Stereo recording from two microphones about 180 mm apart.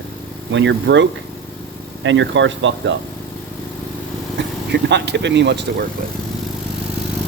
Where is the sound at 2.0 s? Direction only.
90° right.